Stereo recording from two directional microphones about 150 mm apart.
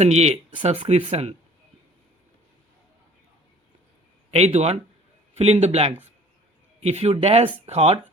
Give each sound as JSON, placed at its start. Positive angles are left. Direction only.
{"t": 0.0, "sound": "speech", "side_deg": -45}
{"t": 4.3, "sound": "speech", "side_deg": -45}